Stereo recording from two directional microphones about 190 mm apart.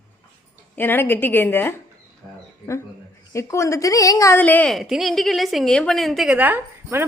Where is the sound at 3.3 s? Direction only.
15° left (ahead or behind).